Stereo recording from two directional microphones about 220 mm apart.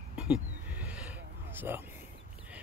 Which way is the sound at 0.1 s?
5° right (ahead or behind).